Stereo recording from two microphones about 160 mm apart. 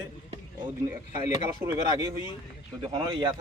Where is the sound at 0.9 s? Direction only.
20° right (ahead or behind).